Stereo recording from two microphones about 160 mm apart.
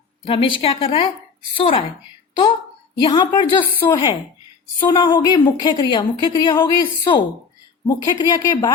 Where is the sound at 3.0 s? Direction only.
30° left (ahead or behind).